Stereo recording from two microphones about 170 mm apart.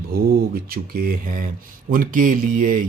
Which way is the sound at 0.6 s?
65° right (ahead or behind).